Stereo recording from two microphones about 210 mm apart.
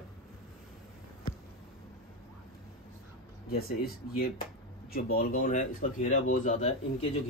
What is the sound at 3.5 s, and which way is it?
A man's voice, 45° left (ahead or behind).